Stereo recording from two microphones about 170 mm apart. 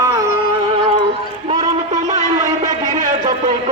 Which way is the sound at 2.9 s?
50° right (ahead or behind).